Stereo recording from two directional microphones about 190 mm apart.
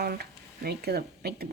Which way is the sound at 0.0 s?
55° right (ahead or behind).